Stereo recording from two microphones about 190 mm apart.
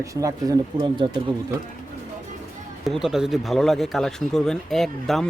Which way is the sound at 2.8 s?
Centre (ahead or behind).